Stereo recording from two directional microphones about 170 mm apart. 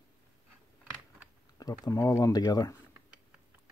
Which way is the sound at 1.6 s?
20° left (ahead or behind).